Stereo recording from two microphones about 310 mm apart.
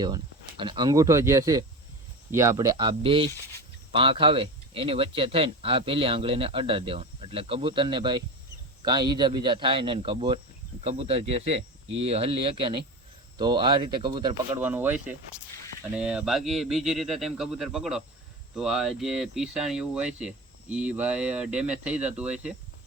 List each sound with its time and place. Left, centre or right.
0.0 s speech: centre